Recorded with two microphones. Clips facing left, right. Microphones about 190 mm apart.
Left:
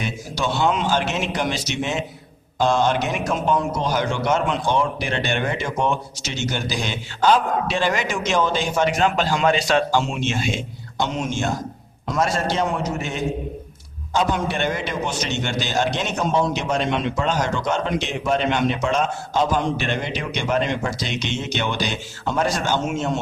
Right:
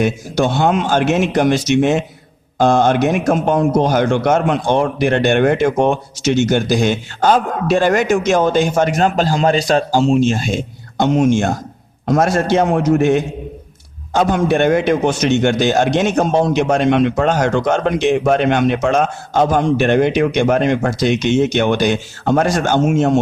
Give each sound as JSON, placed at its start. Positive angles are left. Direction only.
{"t": 0.0, "sound": "a man's voice", "side_deg": -50}